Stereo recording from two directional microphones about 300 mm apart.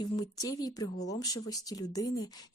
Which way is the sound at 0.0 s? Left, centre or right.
Centre.